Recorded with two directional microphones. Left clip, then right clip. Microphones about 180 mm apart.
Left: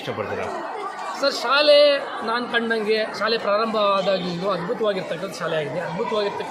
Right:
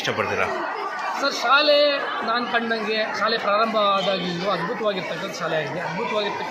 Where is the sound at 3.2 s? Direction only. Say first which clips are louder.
Right 1 dB; 30° left (ahead or behind).